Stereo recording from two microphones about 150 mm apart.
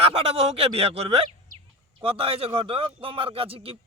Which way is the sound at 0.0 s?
40° right (ahead or behind).